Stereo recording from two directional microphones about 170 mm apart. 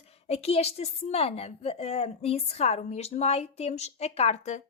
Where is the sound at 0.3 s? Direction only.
40° left (ahead or behind).